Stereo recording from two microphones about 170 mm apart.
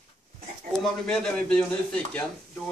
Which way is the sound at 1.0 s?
5° left (ahead or behind).